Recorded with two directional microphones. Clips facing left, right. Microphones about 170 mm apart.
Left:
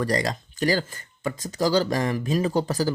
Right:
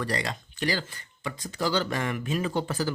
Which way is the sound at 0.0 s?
40° left (ahead or behind).